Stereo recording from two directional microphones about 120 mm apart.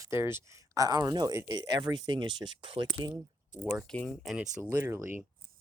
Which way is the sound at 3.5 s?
80° left.